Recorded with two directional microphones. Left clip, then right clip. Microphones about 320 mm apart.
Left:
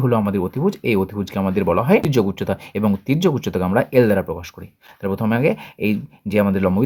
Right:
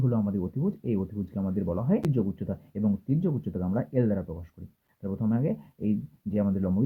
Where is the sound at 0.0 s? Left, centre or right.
Left.